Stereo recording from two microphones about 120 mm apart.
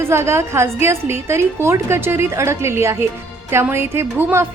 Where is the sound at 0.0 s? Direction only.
20° right (ahead or behind).